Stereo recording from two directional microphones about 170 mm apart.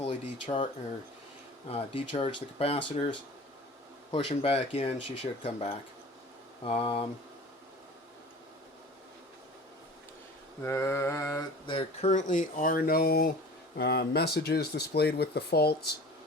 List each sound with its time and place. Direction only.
0.0 s speech: 40° left (ahead or behind)
1.7 s speech: 30° left (ahead or behind)
4.1 s speech: 35° left (ahead or behind)
10.6 s mantra: 15° left (ahead or behind)
11.6 s speech: 30° left (ahead or behind); by 16.0 s 70° left (ahead or behind)